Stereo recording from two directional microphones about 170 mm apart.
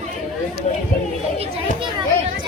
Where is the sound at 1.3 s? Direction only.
35° right (ahead or behind).